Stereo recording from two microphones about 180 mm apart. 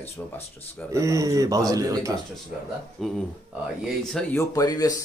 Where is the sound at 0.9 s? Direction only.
15° right (ahead or behind).